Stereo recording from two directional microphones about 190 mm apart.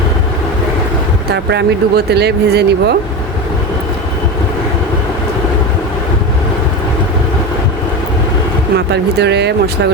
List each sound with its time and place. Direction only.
1.3 s speech: 60° right (ahead or behind)
8.7 s speech: 60° right (ahead or behind)